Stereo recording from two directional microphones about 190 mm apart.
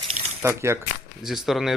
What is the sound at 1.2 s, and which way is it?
Speech, centre (ahead or behind).